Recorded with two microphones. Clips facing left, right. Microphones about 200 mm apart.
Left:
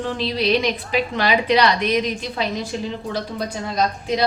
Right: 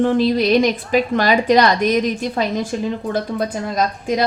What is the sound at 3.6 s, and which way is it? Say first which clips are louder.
Speech: right 2 dB; 50° right (ahead or behind).